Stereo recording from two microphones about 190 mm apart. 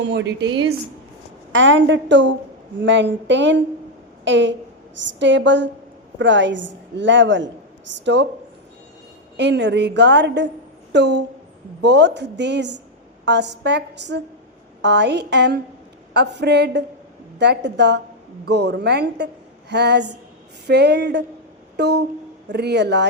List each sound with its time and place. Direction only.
0.0 s a woman's voice: 70° right (ahead or behind)
1.5 s a woman's voice: 75° right (ahead or behind)
9.4 s a woman's voice: 65° right (ahead or behind)
21.8 s a sound: 60° right (ahead or behind)
22.4 s a woman's voice: 60° right (ahead or behind)